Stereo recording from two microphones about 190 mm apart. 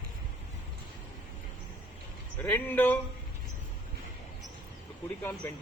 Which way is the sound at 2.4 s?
10° left (ahead or behind).